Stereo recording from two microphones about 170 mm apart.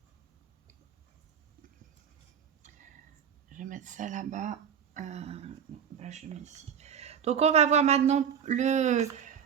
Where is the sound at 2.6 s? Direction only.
45° right (ahead or behind).